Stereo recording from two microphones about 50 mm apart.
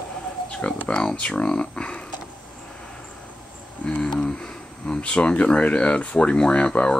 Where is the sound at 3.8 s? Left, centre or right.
Left.